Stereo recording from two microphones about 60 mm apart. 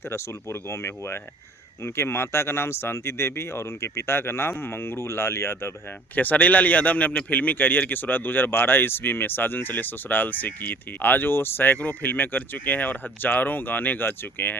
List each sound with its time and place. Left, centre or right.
0.1 s speech: left
6.1 s a man's voice: left